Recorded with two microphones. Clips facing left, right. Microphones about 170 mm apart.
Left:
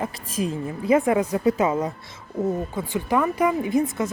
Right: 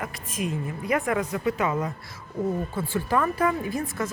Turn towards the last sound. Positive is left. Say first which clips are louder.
# left 6 dB
turn(degrees=20)  # may be behind; listen again after turning